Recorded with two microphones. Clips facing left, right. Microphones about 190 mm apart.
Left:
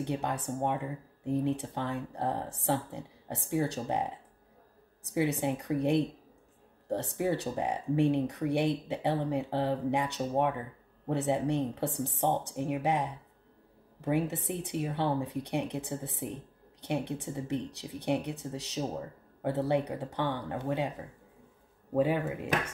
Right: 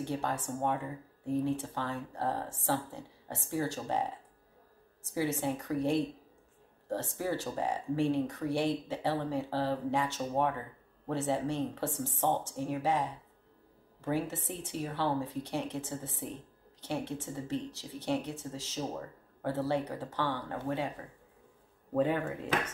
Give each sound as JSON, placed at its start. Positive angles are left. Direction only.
{"t": 0.0, "sound": "speech", "side_deg": 20}
{"t": 5.1, "sound": "speech", "side_deg": 20}
{"t": 7.5, "sound": "speech", "side_deg": 15}
{"t": 17.6, "sound": "speech", "side_deg": 60}
{"t": 18.0, "sound": "speech", "side_deg": 15}
{"t": 21.9, "sound": "speech", "side_deg": 10}